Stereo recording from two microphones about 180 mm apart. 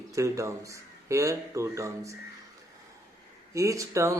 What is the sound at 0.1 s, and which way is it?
Speech, 15° right (ahead or behind).